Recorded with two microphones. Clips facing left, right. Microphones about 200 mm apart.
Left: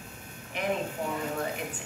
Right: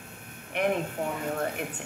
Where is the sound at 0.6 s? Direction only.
60° right (ahead or behind).